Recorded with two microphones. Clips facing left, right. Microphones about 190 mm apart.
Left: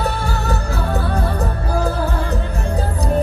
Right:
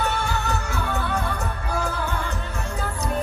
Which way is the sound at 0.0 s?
35° left (ahead or behind).